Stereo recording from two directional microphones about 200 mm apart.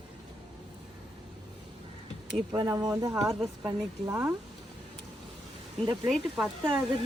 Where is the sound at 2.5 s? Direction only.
20° right (ahead or behind).